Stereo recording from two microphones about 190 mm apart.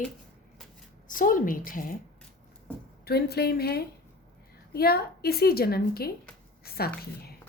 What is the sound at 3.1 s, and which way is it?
A woman's voice, 55° left (ahead or behind).